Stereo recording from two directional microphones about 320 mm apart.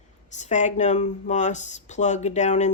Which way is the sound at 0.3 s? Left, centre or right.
Left.